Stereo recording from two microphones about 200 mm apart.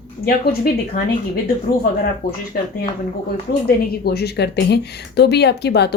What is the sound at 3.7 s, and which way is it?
A woman's voice, 55° left (ahead or behind).